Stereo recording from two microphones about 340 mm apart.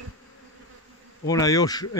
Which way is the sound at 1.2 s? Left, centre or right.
Centre.